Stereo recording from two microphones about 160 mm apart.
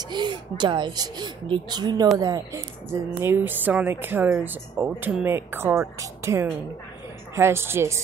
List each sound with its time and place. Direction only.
0.1 s a woman's voice: 30° right (ahead or behind)